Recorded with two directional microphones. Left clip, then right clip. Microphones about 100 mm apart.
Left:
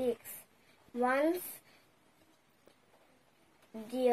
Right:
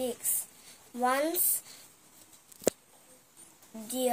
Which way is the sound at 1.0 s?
5° right (ahead or behind).